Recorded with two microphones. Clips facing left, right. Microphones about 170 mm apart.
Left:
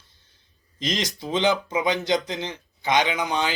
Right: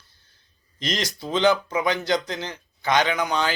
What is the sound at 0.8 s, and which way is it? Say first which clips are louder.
Speech: left 1 dB; 20° left (ahead or behind).